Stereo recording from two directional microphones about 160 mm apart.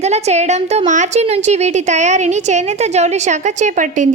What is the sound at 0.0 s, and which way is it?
A woman's voice, 45° right (ahead or behind).